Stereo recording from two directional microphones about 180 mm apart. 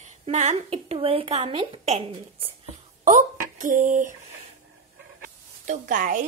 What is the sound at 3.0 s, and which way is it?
Speech, 45° right (ahead or behind).